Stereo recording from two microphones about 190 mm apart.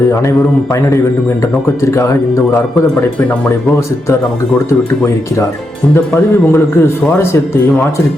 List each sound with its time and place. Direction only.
1.9 s a man's voice: 15° left (ahead or behind)
6.5 s a man's voice: 15° left (ahead or behind)